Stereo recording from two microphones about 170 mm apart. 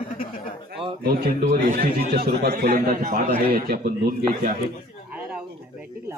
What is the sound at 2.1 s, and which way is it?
A man's voice, 70° right (ahead or behind).